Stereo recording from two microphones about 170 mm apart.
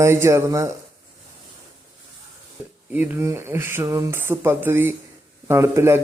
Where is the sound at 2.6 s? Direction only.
10° right (ahead or behind).